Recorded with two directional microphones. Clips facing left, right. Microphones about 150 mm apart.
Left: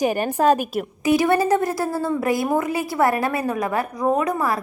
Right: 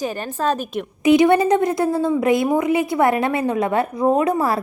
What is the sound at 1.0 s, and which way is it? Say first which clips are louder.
A woman's voice: right 4 dB; 20° right (ahead or behind).